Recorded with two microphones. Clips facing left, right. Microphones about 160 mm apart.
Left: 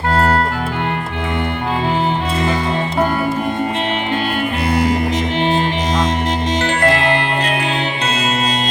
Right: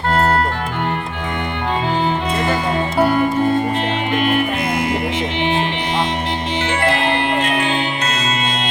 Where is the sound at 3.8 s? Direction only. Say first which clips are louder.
Even; 35° left (ahead or behind).